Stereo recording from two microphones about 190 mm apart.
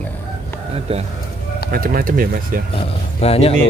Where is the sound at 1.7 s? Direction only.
50° right (ahead or behind).